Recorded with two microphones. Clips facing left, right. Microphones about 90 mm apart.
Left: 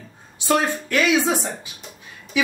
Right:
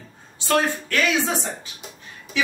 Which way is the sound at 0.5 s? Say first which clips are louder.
Left 1 dB; 15° left (ahead or behind).